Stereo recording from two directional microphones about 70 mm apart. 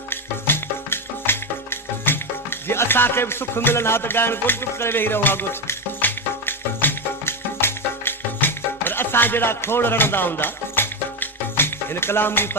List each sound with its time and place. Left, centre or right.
0.1 s music: left